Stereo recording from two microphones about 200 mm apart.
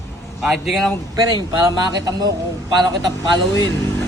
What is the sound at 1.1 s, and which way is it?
Speech, 20° right (ahead or behind).